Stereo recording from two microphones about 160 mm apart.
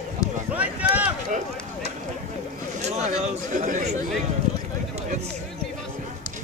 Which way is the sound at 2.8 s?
45° right (ahead or behind).